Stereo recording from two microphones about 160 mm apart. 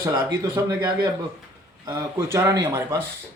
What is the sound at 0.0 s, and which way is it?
Speech, 20° right (ahead or behind).